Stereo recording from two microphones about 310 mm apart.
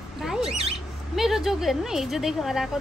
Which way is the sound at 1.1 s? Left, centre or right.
Centre.